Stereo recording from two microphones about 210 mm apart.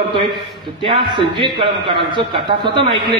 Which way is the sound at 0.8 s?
25° right (ahead or behind).